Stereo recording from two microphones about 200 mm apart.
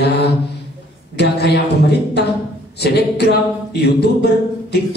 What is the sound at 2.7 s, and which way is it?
Speech, 55° left (ahead or behind).